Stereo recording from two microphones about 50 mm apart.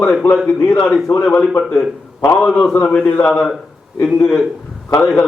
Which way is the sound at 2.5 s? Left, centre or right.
Centre.